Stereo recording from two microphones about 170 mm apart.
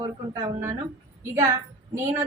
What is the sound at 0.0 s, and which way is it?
A woman's voice, 20° right (ahead or behind).